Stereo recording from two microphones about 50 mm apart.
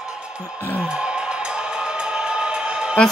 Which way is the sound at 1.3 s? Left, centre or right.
Centre.